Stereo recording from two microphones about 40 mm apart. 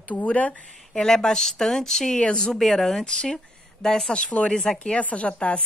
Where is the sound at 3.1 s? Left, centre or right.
Centre.